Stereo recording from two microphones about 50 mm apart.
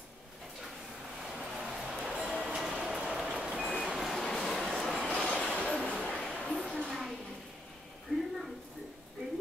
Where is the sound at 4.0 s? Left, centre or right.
Centre.